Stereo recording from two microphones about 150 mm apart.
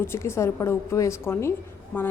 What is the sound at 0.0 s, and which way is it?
A woman's voice, 15° left (ahead or behind).